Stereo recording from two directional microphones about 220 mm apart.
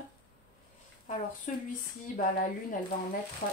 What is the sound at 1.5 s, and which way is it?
Speech, 30° left (ahead or behind).